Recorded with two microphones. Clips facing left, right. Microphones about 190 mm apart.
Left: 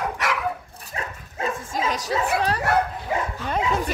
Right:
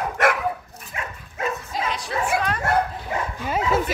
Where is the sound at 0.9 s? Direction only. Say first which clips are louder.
Left 1 dB; 35° left (ahead or behind).